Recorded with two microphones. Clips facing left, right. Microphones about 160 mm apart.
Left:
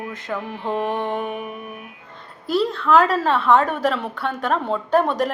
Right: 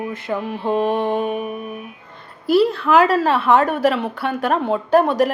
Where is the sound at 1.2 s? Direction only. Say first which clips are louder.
Right 5 dB; 20° right (ahead or behind).